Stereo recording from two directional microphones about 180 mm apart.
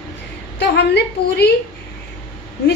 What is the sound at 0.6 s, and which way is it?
Speech, 70° left (ahead or behind).